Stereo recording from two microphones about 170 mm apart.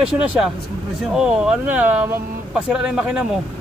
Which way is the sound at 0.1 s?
5° right (ahead or behind).